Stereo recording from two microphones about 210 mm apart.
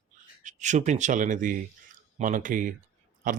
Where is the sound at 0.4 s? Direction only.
35° right (ahead or behind).